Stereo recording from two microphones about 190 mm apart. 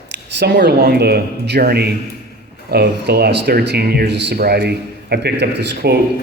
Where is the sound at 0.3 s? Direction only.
60° right (ahead or behind).